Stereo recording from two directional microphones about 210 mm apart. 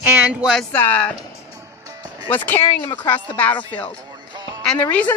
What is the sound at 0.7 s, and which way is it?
Speech, 10° left (ahead or behind).